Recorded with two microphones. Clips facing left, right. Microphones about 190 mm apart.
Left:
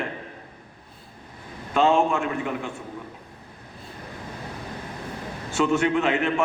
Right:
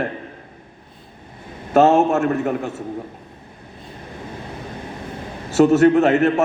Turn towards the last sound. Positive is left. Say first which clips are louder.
# right 9 dB
turn(degrees=-40)  # may be behind; listen again after turning